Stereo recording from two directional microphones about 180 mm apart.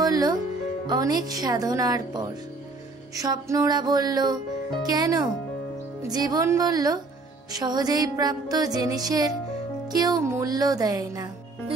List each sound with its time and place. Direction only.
0.0 s music: 20° right (ahead or behind)